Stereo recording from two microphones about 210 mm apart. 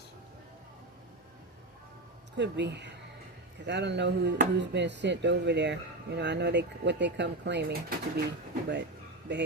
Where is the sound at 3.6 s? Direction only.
55° right (ahead or behind).